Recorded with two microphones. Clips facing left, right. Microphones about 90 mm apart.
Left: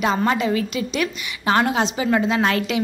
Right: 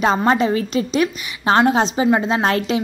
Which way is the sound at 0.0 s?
30° right (ahead or behind).